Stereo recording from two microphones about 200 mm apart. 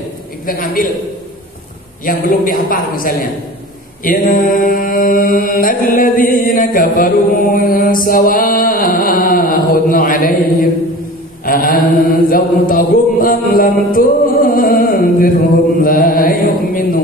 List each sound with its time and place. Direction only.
0.5 s mantra: 45° left (ahead or behind)
2.0 s mantra: 45° left (ahead or behind)